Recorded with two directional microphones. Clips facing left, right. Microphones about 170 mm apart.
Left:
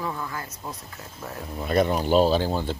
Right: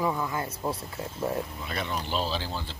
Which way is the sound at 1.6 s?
45° left (ahead or behind).